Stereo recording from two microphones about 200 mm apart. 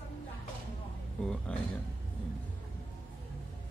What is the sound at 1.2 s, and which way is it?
Speech, 5° left (ahead or behind).